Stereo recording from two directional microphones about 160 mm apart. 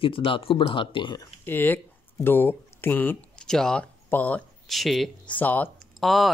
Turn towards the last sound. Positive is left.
turn(degrees=0)  # may be behind; listen again after turning